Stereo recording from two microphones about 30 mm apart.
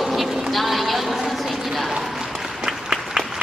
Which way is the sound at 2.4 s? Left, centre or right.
Centre.